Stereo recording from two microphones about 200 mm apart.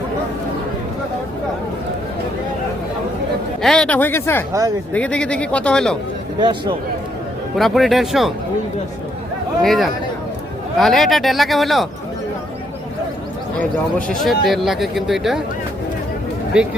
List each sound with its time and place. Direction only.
3.6 s speech: centre (ahead or behind)
6.4 s a man's voice: 25° right (ahead or behind)
7.5 s speech: centre (ahead or behind)
9.6 s speech: centre (ahead or behind)
14.1 s speech: centre (ahead or behind)
16.5 s speech: 5° right (ahead or behind)